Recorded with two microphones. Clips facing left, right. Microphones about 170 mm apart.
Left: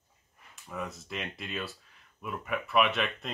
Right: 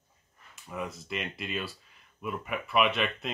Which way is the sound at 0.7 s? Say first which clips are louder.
Right 2 dB; centre (ahead or behind).